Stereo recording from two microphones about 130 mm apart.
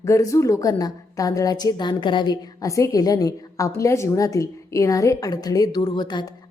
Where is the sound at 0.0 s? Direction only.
25° left (ahead or behind).